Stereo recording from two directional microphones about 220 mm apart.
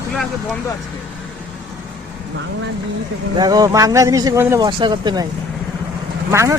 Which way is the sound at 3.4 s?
15° right (ahead or behind).